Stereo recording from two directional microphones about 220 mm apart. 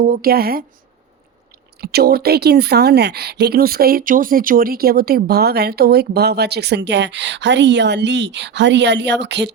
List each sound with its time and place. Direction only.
0.1 s speech: 45° right (ahead or behind)
1.8 s speech: 45° right (ahead or behind)